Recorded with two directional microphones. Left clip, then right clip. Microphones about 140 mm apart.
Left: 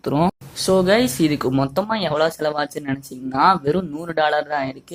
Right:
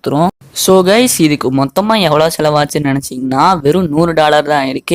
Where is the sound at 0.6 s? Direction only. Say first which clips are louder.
Right 8 dB; 40° right (ahead or behind).